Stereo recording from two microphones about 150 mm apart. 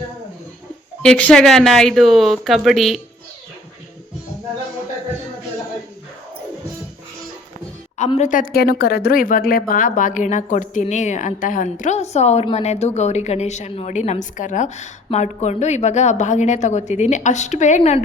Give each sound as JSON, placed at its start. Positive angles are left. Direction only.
{"t": 1.0, "sound": "a woman's voice", "side_deg": 5}
{"t": 8.2, "sound": "a woman's voice", "side_deg": 65}